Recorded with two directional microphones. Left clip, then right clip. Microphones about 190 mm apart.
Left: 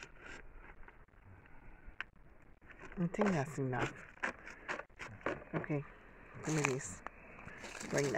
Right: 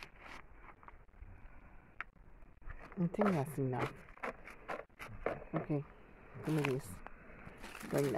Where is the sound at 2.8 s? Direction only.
5° left (ahead or behind).